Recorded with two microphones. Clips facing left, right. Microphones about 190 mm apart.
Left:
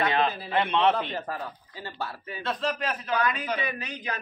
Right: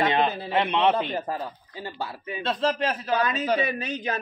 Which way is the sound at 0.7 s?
15° right (ahead or behind).